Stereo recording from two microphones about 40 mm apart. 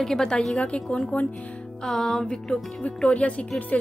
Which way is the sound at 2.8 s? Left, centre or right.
Left.